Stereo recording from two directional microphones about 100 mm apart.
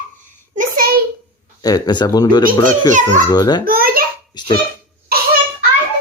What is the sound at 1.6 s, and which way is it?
Speech, 40° left (ahead or behind).